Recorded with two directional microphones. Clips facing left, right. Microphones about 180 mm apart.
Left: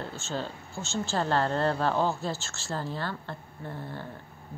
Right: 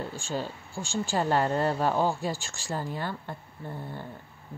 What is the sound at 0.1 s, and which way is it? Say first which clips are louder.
Speech: right 1 dB; 10° right (ahead or behind).